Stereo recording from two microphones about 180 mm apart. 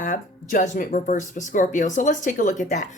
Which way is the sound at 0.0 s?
50° left (ahead or behind).